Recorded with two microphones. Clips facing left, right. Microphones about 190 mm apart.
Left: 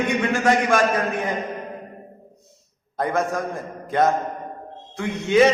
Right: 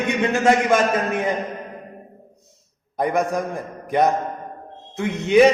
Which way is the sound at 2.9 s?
15° right (ahead or behind).